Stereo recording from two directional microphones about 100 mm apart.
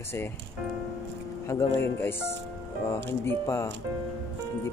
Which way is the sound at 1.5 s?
25° left (ahead or behind).